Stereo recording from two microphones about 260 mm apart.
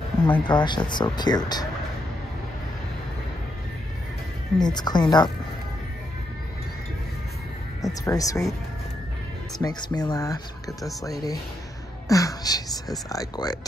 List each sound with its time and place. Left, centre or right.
0.3 s speech: centre
4.6 s speech: centre
7.8 s speech: centre
9.6 s speech: centre